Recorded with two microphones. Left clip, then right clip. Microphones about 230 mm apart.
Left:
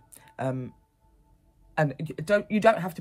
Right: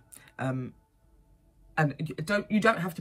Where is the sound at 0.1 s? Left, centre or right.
Left.